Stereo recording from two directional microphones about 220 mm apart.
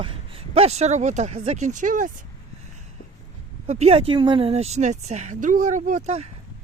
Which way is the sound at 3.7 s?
30° right (ahead or behind).